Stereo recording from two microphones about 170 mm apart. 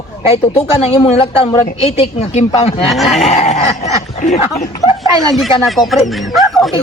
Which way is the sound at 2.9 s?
Centre (ahead or behind).